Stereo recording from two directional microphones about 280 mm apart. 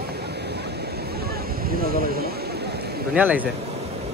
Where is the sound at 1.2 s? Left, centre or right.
Right.